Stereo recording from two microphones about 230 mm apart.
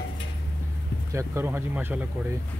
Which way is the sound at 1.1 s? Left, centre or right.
Centre.